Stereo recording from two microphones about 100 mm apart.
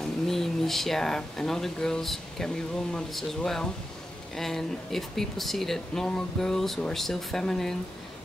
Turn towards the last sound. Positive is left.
turn(degrees=5)  # may be behind; listen again after turning